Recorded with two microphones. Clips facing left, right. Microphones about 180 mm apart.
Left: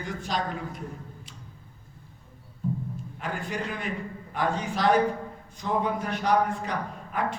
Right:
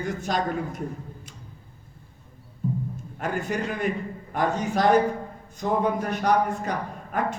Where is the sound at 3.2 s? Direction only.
45° right (ahead or behind).